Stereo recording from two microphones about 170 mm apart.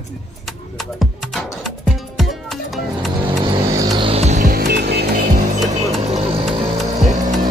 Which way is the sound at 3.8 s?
25° right (ahead or behind).